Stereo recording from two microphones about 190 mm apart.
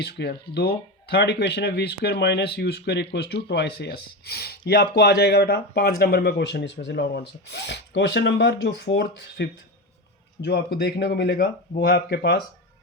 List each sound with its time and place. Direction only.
0.0 s speech: 60° left (ahead or behind)